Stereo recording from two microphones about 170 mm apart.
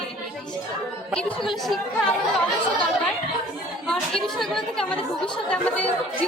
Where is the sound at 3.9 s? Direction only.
Centre (ahead or behind).